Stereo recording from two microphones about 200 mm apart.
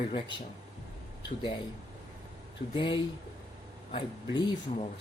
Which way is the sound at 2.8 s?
25° left (ahead or behind).